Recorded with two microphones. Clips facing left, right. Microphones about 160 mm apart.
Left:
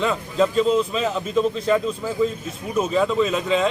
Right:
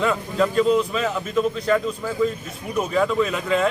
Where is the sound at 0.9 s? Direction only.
25° left (ahead or behind).